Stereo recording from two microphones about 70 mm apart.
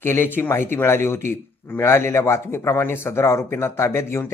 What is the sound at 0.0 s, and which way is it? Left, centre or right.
A man's voice, left.